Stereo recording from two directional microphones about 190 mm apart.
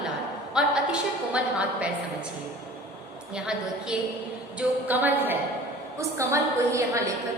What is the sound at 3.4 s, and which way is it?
A woman's voice, 5° right (ahead or behind).